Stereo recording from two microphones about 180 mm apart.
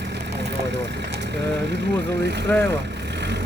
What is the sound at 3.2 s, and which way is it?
Vehicle, 70° right (ahead or behind).